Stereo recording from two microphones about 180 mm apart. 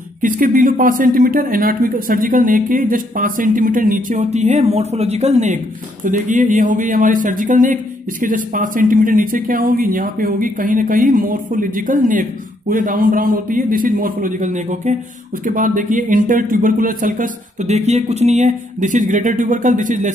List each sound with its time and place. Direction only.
0.2 s a man's voice: 50° right (ahead or behind)